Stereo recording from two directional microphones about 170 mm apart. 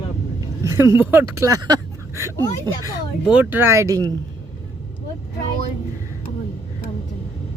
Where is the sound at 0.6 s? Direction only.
15° right (ahead or behind).